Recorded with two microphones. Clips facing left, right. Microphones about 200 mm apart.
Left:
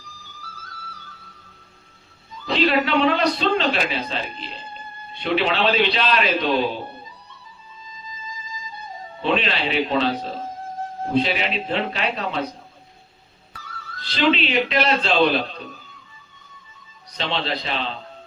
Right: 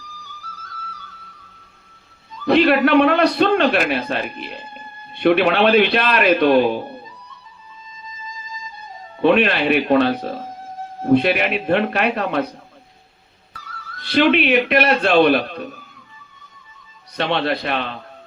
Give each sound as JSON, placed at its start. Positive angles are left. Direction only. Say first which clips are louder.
{"t": 2.5, "sound": "a man's voice", "louder": "right 6 dB", "side_deg": -60}
{"t": 9.2, "sound": "a man's voice", "louder": "right 7 dB", "side_deg": -60}
{"t": 14.0, "sound": "a man's voice", "louder": "right 5 dB", "side_deg": -60}
{"t": 17.2, "sound": "a man's voice", "louder": "right 6 dB", "side_deg": -60}